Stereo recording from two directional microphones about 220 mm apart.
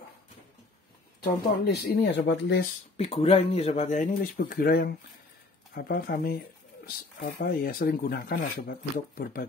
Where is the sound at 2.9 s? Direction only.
25° left (ahead or behind).